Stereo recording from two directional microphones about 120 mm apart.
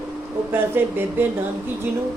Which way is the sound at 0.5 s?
20° right (ahead or behind).